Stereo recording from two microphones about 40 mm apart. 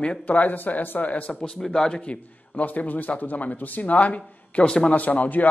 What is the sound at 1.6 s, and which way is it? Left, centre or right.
Speech, centre.